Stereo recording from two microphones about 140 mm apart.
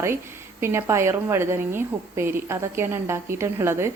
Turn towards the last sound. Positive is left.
turn(degrees=-20)  # may be behind; listen again after turning